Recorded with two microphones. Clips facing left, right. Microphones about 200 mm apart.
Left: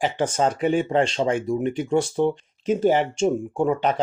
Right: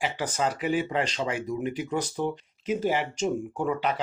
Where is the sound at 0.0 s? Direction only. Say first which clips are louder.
Left 6 dB; 25° left (ahead or behind).